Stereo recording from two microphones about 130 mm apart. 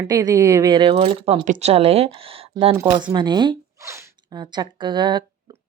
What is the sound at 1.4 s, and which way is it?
Speech, 65° right (ahead or behind).